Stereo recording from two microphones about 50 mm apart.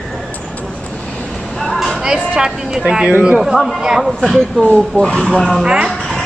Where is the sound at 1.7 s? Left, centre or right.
Centre.